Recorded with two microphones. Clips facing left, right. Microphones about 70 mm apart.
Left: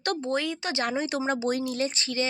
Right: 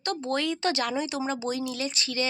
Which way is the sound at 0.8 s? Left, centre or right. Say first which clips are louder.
Left 1 dB; left.